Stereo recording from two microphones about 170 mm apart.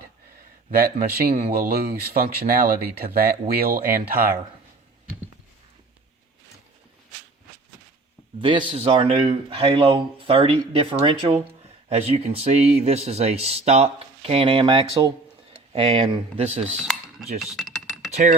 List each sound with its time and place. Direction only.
0.8 s speech: 60° right (ahead or behind)
8.4 s speech: 30° right (ahead or behind)
16.6 s typing: 5° right (ahead or behind)
18.1 s speech: 45° right (ahead or behind)